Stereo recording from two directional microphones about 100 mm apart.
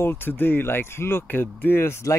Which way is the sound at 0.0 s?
20° left (ahead or behind).